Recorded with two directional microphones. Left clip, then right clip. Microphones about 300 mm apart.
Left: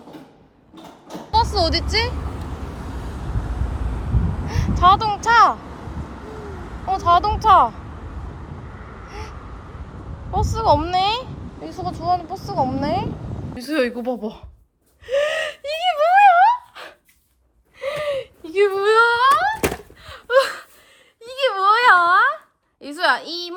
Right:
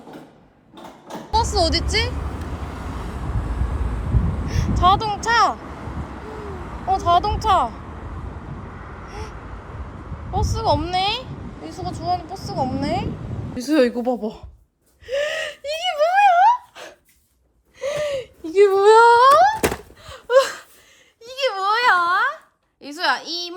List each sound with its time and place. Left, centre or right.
1.0 s a sound: centre
4.4 s a sound: centre
4.8 s speech: centre
6.8 s speech: centre
10.5 s speech: centre
11.7 s speech: centre
12.5 s speech: centre
15.0 s gasp: centre
17.7 s whimper: centre
19.6 s door: centre
21.2 s a sound: centre